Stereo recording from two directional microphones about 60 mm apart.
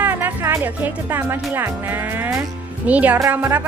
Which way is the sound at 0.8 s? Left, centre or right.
Right.